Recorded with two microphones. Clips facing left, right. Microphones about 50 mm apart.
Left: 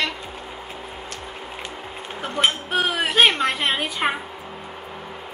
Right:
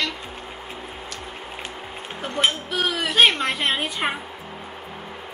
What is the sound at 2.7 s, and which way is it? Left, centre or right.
Speech, left.